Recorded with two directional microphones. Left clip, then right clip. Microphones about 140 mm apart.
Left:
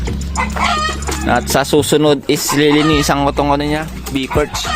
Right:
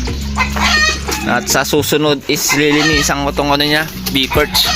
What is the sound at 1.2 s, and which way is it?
Speech, 20° left (ahead or behind).